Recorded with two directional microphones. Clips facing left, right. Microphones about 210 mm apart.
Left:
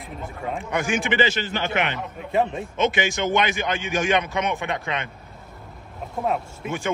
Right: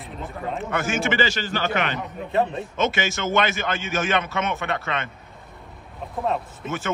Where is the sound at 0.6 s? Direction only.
15° left (ahead or behind).